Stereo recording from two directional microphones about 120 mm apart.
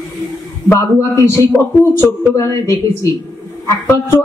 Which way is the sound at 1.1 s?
20° left (ahead or behind).